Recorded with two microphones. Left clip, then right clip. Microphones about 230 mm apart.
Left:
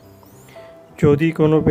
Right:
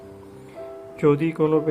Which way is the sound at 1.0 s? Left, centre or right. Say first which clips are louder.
Left 4 dB; left.